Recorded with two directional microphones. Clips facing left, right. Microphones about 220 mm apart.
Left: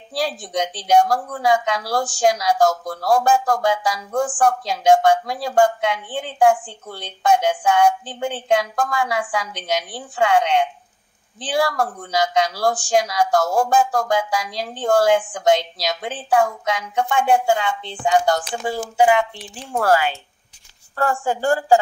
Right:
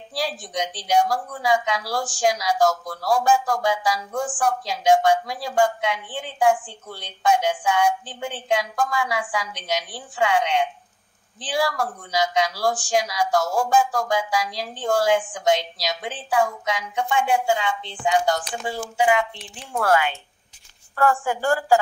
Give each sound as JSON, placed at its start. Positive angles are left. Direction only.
{"t": 0.1, "sound": "speech", "side_deg": 50}
{"t": 18.7, "sound": "speech", "side_deg": 40}